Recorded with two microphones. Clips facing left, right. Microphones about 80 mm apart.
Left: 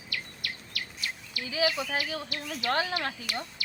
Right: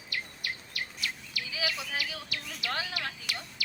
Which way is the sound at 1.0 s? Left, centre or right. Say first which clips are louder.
Even; left.